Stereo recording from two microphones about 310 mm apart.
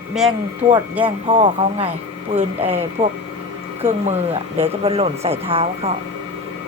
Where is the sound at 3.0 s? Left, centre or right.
Centre.